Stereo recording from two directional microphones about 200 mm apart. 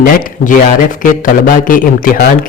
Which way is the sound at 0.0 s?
45° left (ahead or behind).